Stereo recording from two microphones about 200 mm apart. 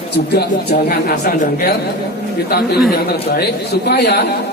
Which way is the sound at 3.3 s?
55° left (ahead or behind).